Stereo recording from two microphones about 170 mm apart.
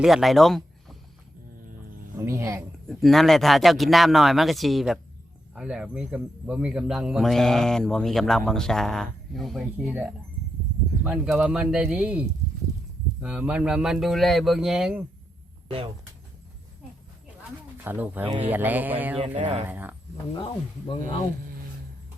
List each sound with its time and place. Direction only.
0.0 s speech: centre (ahead or behind)
2.1 s speech: 15° right (ahead or behind)
2.8 s a man's voice: centre (ahead or behind)
13.2 s a man's voice: 5° right (ahead or behind)
17.8 s speech: 10° right (ahead or behind)
19.2 s speech: 35° right (ahead or behind)
19.6 s speech: 10° right (ahead or behind)
20.3 s speech: 30° left (ahead or behind)